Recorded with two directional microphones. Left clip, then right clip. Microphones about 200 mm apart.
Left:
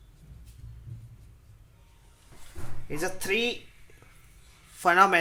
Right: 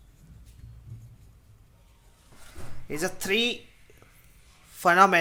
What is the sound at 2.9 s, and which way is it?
Speech, 25° right (ahead or behind).